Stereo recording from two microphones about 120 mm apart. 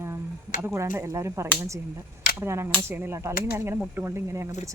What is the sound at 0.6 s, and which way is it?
Speech, 20° right (ahead or behind).